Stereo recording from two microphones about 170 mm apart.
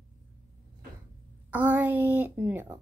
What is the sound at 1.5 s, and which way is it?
A woman's voice, 10° right (ahead or behind).